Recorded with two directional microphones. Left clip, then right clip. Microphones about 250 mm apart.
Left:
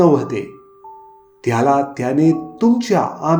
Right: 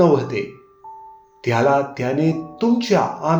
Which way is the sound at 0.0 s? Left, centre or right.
Left.